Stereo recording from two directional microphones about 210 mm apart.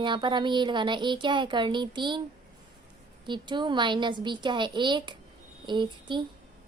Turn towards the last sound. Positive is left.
turn(degrees=-20)  # may be behind; listen again after turning